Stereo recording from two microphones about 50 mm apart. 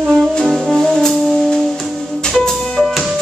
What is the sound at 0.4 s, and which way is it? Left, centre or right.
Brass instrument, centre.